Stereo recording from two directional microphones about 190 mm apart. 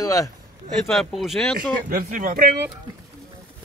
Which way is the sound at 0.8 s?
Centre (ahead or behind).